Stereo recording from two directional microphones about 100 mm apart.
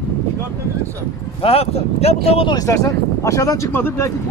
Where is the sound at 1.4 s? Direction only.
80° left.